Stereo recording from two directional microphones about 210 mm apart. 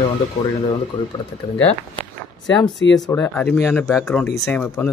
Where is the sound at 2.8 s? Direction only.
60° left (ahead or behind).